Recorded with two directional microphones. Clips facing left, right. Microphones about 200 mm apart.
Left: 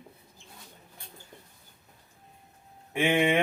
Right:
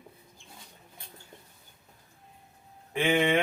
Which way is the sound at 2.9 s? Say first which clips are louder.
Left 1 dB; 10° left (ahead or behind).